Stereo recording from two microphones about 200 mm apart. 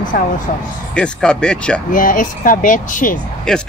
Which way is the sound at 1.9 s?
40° left (ahead or behind).